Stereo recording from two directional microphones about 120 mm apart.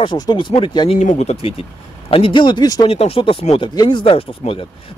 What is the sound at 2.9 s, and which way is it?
Speech, 55° left (ahead or behind).